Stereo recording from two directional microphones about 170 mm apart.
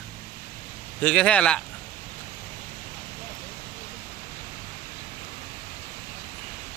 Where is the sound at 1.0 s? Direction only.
5° left (ahead or behind).